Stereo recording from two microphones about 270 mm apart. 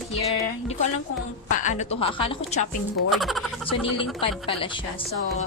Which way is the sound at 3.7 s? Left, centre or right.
Centre.